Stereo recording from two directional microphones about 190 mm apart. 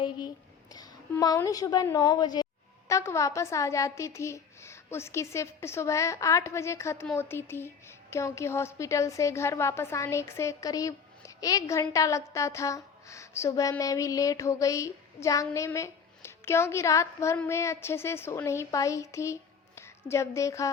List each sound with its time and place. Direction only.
0.7 s a woman's voice: 20° left (ahead or behind)